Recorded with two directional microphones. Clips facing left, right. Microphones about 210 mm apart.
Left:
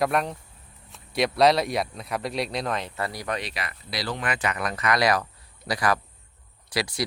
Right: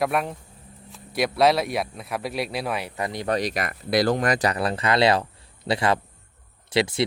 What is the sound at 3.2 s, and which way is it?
A man's voice, 40° right (ahead or behind).